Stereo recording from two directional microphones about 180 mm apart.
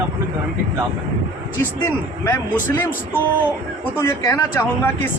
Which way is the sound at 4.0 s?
15° left (ahead or behind).